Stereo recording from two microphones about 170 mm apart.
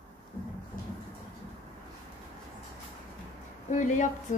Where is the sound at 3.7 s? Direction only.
45° left (ahead or behind).